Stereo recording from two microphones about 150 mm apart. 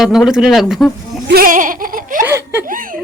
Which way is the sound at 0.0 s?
Centre (ahead or behind).